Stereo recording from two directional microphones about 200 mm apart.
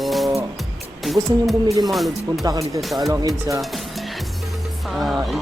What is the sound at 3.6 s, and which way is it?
Music, centre (ahead or behind).